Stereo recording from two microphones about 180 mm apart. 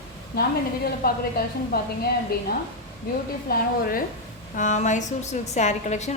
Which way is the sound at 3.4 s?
55° left (ahead or behind).